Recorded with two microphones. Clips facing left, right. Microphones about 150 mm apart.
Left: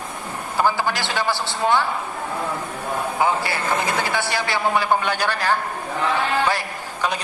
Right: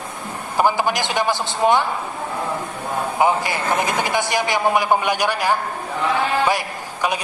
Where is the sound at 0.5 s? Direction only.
15° right (ahead or behind).